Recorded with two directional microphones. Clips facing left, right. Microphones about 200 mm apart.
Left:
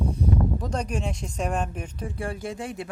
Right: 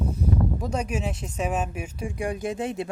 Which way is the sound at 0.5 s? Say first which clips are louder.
Right 1 dB; 10° right (ahead or behind).